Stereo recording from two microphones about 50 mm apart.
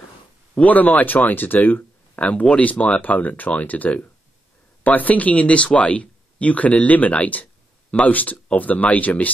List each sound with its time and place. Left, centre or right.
0.6 s speech: left
2.1 s speech: left